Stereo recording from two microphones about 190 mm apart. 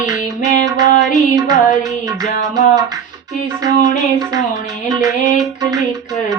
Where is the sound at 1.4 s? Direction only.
20° right (ahead or behind).